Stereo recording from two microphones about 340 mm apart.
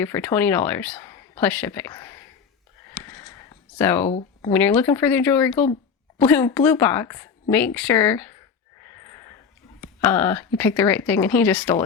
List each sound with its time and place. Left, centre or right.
0.0 s a woman's voice: centre
3.0 s a sound: centre
3.8 s a woman's voice: centre
4.0 s speech: centre
4.5 s a woman's voice: centre
10.0 s a woman's voice: centre